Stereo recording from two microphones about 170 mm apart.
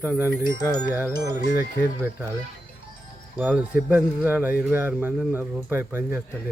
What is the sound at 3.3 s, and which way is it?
Speech, 10° right (ahead or behind).